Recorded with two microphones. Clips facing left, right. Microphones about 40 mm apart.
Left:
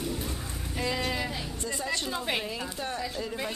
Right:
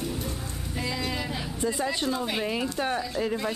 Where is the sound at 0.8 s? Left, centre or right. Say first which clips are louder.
Left 1 dB; centre.